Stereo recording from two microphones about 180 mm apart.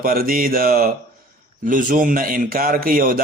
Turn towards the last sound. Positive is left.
turn(degrees=-50)  # may be behind; listen again after turning